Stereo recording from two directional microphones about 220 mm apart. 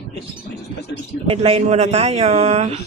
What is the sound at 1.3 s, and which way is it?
Speech, 25° right (ahead or behind).